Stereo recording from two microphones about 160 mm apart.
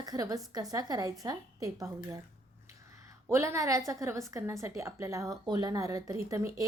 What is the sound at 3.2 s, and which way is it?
Speech, 15° right (ahead or behind).